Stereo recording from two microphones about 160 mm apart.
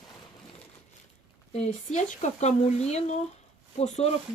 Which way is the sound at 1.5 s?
45° left (ahead or behind).